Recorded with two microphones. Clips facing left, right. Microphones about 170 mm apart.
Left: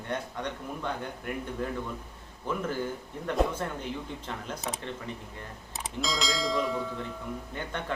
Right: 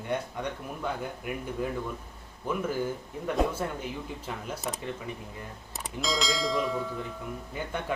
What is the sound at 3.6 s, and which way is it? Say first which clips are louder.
A man's voice: right 1 dB; 10° right (ahead or behind).